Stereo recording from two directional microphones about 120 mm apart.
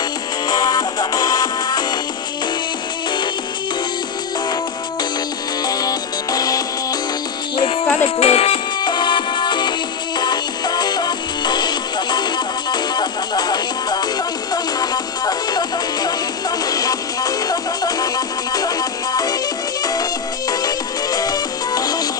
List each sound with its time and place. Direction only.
0.5 s music: 35° left (ahead or behind)
5.7 s music: 35° left (ahead or behind)
8.0 s music: 55° left (ahead or behind)
8.8 s music: 40° left (ahead or behind)